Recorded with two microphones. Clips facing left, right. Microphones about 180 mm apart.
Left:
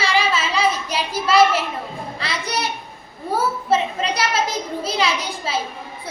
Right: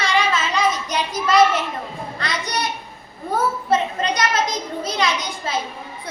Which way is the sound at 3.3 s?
5° left (ahead or behind).